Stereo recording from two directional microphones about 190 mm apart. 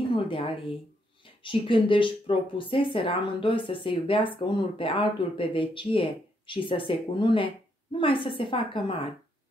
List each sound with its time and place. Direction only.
0.1 s speech: 30° left (ahead or behind)